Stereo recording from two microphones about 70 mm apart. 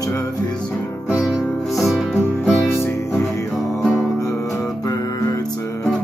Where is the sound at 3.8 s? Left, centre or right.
Centre.